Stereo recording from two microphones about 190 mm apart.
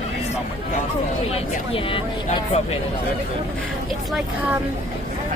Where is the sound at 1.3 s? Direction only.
30° left (ahead or behind).